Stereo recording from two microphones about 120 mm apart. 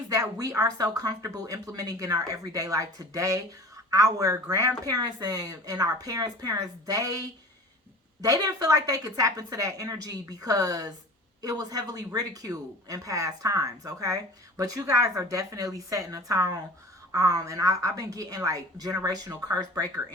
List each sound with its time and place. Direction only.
0.1 s speech: 30° right (ahead or behind)
8.2 s speech: 30° right (ahead or behind)